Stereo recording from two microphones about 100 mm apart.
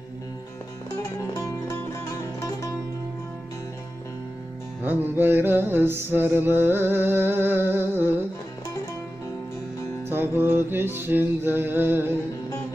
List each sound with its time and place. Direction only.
1.3 s music: 35° left (ahead or behind)
4.8 s mantra: 20° right (ahead or behind)
10.0 s mantra: 20° right (ahead or behind)